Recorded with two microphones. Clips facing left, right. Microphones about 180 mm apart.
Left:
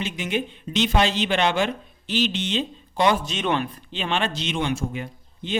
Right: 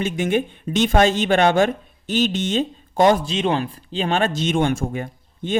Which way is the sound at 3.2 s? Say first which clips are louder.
Right 3 dB; 30° right (ahead or behind).